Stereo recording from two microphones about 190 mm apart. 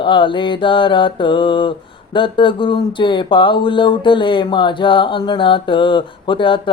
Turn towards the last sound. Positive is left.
turn(degrees=25)  # may be behind; listen again after turning